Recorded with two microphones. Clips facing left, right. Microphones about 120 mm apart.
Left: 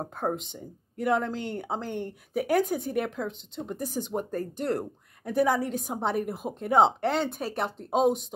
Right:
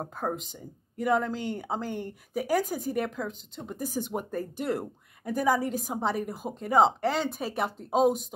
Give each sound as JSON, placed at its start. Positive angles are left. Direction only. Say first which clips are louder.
{"t": 0.0, "sound": "a woman's voice", "louder": "left 2 dB", "side_deg": 0}
{"t": 4.2, "sound": "speech", "louder": "left 2 dB", "side_deg": 45}
{"t": 4.6, "sound": "a woman's voice", "louder": "left 1 dB", "side_deg": -5}